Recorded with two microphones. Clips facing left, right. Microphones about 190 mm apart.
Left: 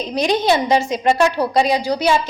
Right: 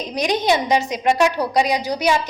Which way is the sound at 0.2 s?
15° right (ahead or behind).